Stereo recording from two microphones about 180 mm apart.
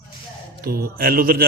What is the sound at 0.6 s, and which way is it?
Speech, 55° right (ahead or behind).